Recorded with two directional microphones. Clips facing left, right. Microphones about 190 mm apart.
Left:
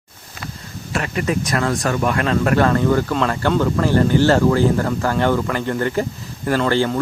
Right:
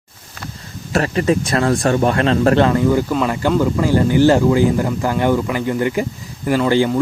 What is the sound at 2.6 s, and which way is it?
Speech, 15° right (ahead or behind).